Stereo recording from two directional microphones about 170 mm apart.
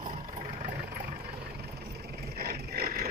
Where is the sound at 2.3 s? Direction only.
65° right (ahead or behind).